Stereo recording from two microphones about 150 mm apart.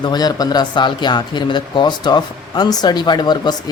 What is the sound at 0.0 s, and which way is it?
Speech, 25° left (ahead or behind).